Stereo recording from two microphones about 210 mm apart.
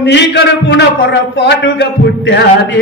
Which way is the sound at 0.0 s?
55° left (ahead or behind).